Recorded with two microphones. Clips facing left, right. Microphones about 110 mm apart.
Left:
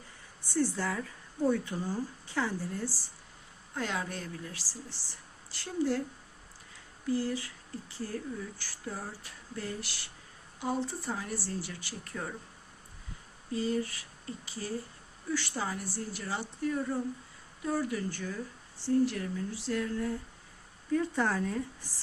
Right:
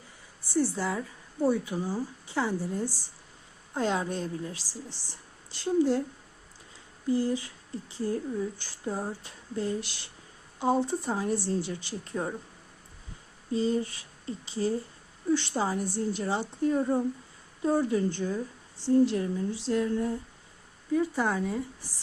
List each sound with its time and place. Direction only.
0.5 s a woman's voice: 15° right (ahead or behind)
7.1 s speech: 20° right (ahead or behind)
13.5 s speech: 25° right (ahead or behind)
20.9 s a woman's voice: 10° right (ahead or behind)